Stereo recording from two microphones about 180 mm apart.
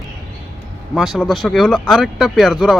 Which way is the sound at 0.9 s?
Centre (ahead or behind).